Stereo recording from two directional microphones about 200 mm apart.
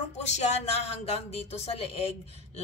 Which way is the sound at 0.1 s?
35° left (ahead or behind).